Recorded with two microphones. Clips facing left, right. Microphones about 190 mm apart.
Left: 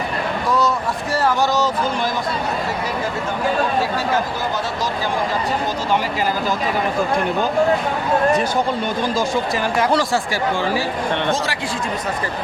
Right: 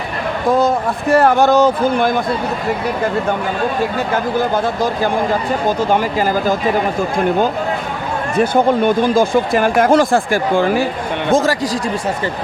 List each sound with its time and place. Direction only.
0.4 s speech: 50° right (ahead or behind)
3.9 s speech: 55° right (ahead or behind)
8.5 s speech: 55° right (ahead or behind)